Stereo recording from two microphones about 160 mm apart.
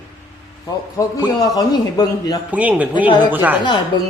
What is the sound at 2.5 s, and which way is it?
Speech, 10° right (ahead or behind).